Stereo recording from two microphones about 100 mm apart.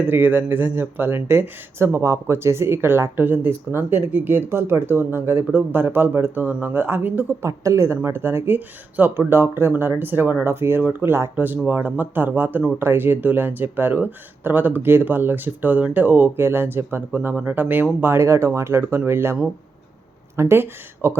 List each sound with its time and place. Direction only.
0.0 s speech: 20° right (ahead or behind)